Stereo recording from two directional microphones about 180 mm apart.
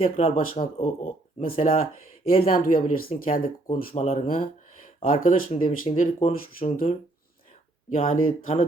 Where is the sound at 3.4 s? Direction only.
35° left (ahead or behind).